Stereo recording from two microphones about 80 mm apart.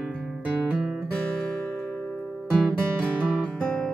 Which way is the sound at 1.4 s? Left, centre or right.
Centre.